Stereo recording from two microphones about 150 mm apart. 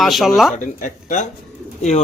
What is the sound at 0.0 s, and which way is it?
Speech, centre (ahead or behind).